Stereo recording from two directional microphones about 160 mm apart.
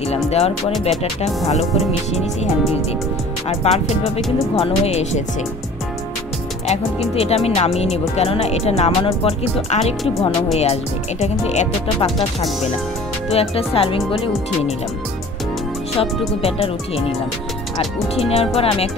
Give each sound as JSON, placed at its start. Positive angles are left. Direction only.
{"t": 0.1, "sound": "music", "side_deg": 40}
{"t": 6.7, "sound": "music", "side_deg": 40}
{"t": 10.6, "sound": "speech", "side_deg": 40}
{"t": 13.3, "sound": "music", "side_deg": 40}
{"t": 16.4, "sound": "music", "side_deg": 40}
{"t": 18.1, "sound": "music", "side_deg": 40}